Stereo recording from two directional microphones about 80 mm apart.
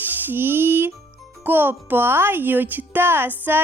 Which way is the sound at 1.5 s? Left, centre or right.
Right.